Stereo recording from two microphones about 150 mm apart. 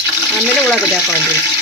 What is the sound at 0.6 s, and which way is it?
Speech, 5° left (ahead or behind).